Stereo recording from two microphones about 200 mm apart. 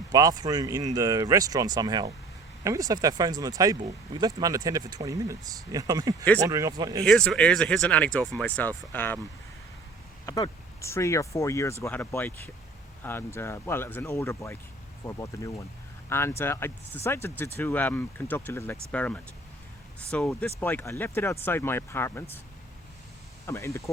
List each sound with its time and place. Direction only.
0.1 s speech: 20° right (ahead or behind)
7.0 s speech: 5° left (ahead or behind)
10.2 s speech: 15° left (ahead or behind)
23.5 s speech: 15° left (ahead or behind)